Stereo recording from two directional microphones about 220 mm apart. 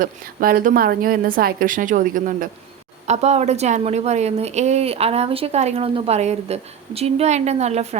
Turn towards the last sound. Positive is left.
turn(degrees=-30)  # may be behind; listen again after turning